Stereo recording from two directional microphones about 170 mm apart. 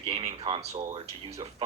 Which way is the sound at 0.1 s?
35° right (ahead or behind).